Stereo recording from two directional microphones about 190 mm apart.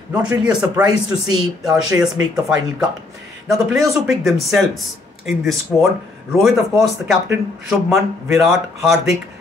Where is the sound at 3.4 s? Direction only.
Centre (ahead or behind).